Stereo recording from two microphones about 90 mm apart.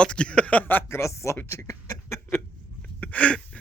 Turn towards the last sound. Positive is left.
turn(degrees=15)  # may be behind; listen again after turning